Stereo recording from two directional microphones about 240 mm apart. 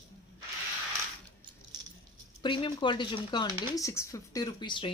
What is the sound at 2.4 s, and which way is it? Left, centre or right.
Speech, centre.